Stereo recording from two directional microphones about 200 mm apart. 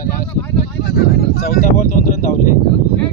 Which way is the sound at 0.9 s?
45° left (ahead or behind).